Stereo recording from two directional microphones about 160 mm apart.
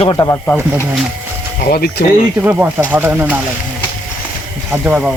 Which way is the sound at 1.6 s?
70° left (ahead or behind).